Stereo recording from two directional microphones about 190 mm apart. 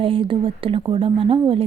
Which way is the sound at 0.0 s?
25° right (ahead or behind).